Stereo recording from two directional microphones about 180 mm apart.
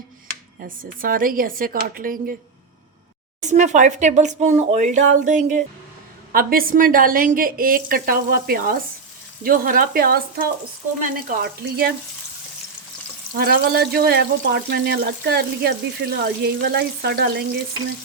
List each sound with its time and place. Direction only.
0.6 s a woman's voice: 50° right (ahead or behind)
3.5 s a woman's voice: 40° right (ahead or behind); by 11.9 s 60° right (ahead or behind)
13.3 s speech: 55° right (ahead or behind)